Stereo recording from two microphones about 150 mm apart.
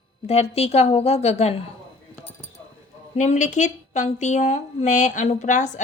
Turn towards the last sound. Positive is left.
turn(degrees=55)  # may be behind; listen again after turning